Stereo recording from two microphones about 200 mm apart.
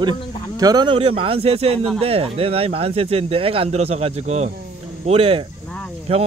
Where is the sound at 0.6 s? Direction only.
20° right (ahead or behind).